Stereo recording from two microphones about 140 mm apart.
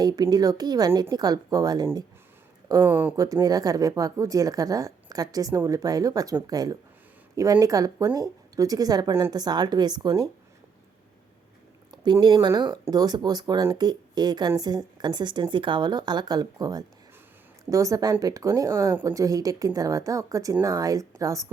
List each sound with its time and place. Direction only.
0.0 s speech: 30° right (ahead or behind)
3.2 s speech: 25° right (ahead or behind)
11.9 s a woman's voice: 30° right (ahead or behind)